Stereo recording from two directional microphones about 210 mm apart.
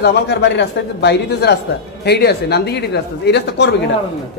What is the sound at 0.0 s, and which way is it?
Speech, 50° left (ahead or behind).